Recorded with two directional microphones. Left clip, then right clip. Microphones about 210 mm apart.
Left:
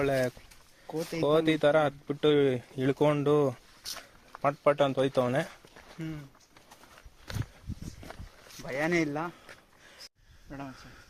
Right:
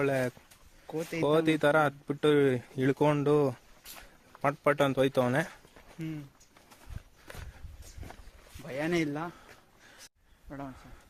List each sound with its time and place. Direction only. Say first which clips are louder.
0.0 s speech: left 1 dB; 15° right (ahead or behind)
0.9 s speech: left 1 dB; 10° left (ahead or behind)
1.2 s speech: left 1 dB; 15° right (ahead or behind)
8.6 s speech: left 2 dB; 5° left (ahead or behind)
10.5 s speech: even; 5° left (ahead or behind)